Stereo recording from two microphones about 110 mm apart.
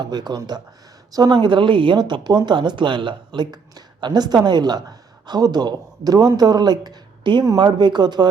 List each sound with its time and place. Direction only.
0.0 s speech: 40° right (ahead or behind)